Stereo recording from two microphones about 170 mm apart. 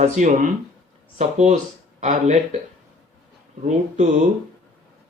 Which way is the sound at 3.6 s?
40° right (ahead or behind).